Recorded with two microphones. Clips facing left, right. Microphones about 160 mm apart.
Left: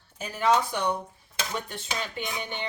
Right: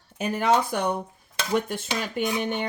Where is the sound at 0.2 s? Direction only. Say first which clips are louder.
Right 2 dB; 60° right (ahead or behind).